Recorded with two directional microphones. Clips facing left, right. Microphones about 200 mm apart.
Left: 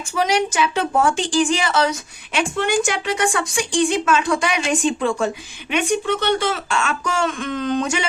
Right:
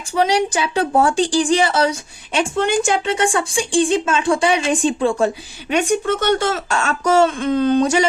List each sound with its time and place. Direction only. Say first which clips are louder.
0.1 s a woman's voice: right 3 dB; 30° right (ahead or behind)
5.7 s a woman's voice: right 3 dB; 45° right (ahead or behind)